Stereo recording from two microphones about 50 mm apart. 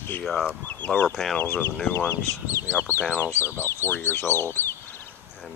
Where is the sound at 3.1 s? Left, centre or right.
Left.